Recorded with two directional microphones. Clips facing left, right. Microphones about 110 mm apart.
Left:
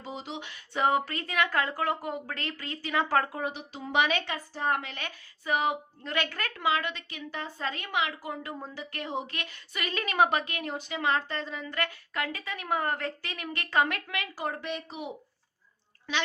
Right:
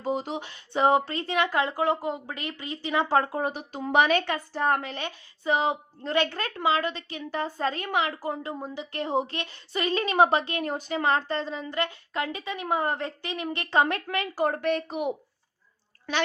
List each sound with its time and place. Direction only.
0.0 s a woman's voice: 45° right (ahead or behind); by 3.4 s 25° right (ahead or behind)
3.4 s a woman's voice: 50° right (ahead or behind)
4.9 s a woman's voice: 25° right (ahead or behind)
8.5 s a woman's voice: 20° right (ahead or behind)
10.7 s a woman's voice: 40° right (ahead or behind)